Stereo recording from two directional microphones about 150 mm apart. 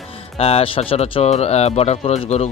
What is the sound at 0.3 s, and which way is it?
Speech, 40° left (ahead or behind).